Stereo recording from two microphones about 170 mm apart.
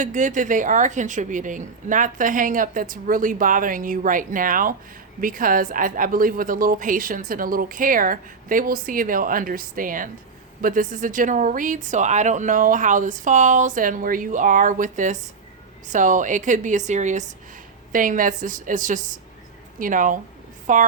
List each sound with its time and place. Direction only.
0.0 s a woman's voice: 50° right (ahead or behind)